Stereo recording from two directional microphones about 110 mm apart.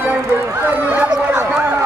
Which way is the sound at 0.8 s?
20° right (ahead or behind).